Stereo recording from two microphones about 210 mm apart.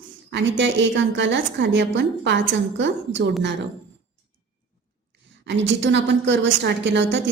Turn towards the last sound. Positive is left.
turn(degrees=-60)  # may be behind; listen again after turning